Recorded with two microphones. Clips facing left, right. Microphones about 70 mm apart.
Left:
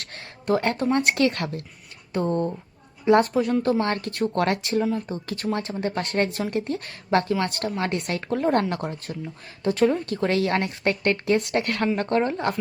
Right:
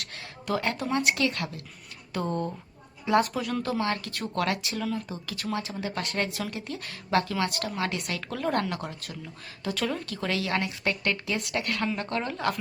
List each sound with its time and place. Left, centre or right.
0.0 s a sound: left
0.9 s a woman's voice: left
2.1 s a woman's voice: left
4.8 s speech: left
5.0 s a woman's voice: left
10.1 s a woman's voice: left